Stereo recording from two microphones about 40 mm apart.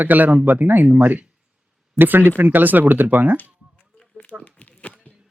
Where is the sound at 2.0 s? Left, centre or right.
Right.